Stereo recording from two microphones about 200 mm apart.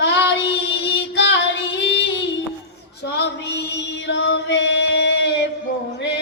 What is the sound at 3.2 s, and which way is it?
Music, 60° left (ahead or behind).